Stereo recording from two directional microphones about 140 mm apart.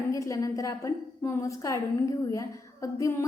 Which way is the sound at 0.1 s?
25° left (ahead or behind).